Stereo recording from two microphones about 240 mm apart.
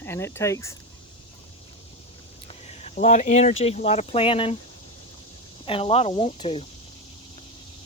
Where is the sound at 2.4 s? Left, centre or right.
Left.